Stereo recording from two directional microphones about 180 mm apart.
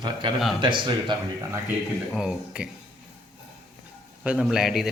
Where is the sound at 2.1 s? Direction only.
5° right (ahead or behind).